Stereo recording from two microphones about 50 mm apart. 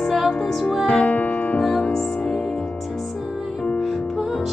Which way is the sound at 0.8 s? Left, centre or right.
Left.